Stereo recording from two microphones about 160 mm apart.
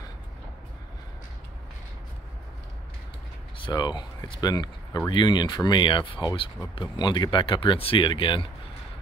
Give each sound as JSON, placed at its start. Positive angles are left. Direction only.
{"t": 3.5, "sound": "speech", "side_deg": 30}